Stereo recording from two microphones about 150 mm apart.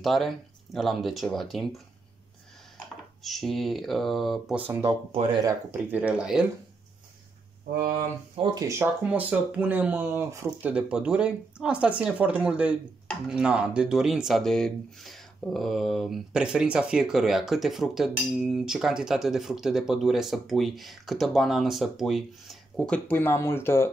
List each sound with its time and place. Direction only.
0.0 s speech: centre (ahead or behind)
3.3 s speech: centre (ahead or behind)
4.6 s speech: 15° right (ahead or behind)
5.1 s speech: 40° right (ahead or behind)
5.4 s speech: 20° right (ahead or behind)
8.4 s speech: 25° right (ahead or behind)
9.3 s speech: 10° right (ahead or behind); by 23.9 s 15° left (ahead or behind)